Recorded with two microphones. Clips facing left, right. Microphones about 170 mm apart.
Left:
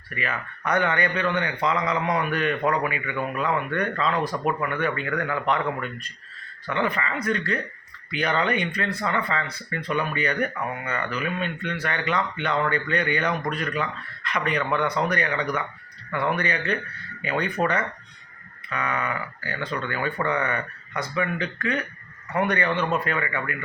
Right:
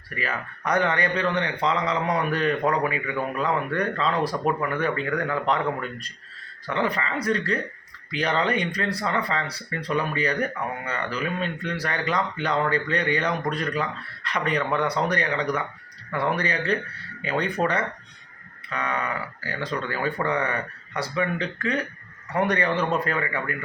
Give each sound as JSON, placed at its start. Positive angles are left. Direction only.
{"t": 0.1, "sound": "speech", "side_deg": -35}
{"t": 6.7, "sound": "speech", "side_deg": -35}